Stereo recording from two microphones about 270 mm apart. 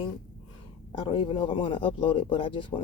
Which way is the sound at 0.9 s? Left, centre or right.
Centre.